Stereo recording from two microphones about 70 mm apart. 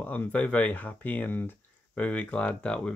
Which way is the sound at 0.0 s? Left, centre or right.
Left.